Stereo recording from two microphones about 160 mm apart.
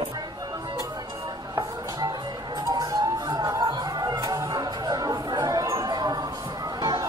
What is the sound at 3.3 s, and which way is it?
Music, 25° right (ahead or behind).